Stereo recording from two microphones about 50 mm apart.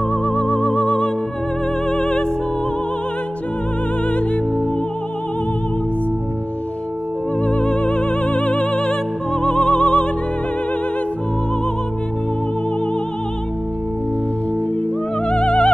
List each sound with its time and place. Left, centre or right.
0.1 s music: left
7.4 s music: left
15.2 s music: left